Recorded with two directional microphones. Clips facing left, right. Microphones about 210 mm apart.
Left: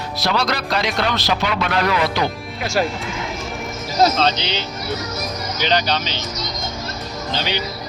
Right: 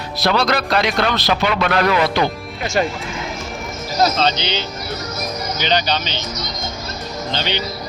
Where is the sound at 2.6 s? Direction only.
Centre (ahead or behind).